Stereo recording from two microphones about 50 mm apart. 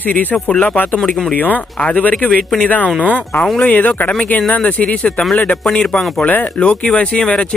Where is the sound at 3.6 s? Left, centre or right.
Left; by 6.0 s centre.